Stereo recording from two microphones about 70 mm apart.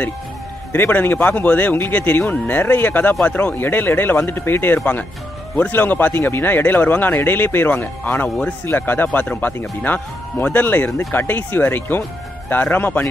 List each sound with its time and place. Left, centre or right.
0.7 s a man's voice: left